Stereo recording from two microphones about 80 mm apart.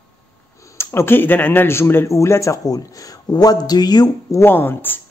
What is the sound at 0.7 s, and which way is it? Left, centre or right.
A man's voice, left.